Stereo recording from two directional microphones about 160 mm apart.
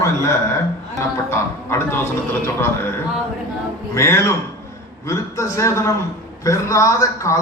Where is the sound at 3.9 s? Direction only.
15° left (ahead or behind).